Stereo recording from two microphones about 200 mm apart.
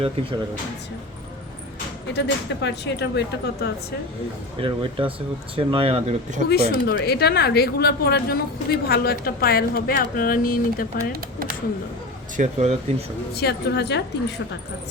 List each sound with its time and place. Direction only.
2.1 s speech: 60° left (ahead or behind)
4.6 s speech: 25° right (ahead or behind)
6.5 s speech: 50° left (ahead or behind)
12.4 s speech: 35° right (ahead or behind)
13.3 s speech: 55° left (ahead or behind)